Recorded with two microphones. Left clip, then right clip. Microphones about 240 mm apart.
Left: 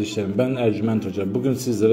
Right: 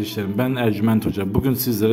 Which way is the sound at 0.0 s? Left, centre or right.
Centre.